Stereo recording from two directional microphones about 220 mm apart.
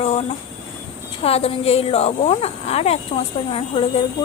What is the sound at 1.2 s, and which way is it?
A woman's voice, 25° left (ahead or behind).